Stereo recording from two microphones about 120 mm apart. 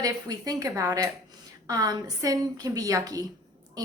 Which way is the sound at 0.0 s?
30° right (ahead or behind).